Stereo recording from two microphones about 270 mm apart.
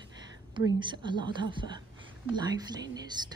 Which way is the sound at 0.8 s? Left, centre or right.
Centre.